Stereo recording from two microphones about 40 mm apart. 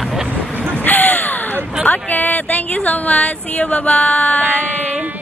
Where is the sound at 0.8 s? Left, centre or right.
Left.